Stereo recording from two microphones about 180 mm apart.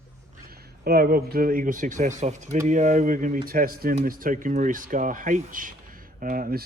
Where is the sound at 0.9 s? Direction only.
55° right (ahead or behind).